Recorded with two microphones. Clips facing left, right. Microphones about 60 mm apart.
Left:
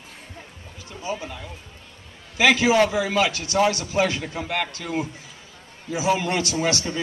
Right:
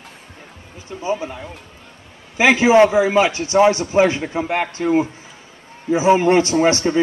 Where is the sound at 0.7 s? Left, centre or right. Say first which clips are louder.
Right 7 dB; right.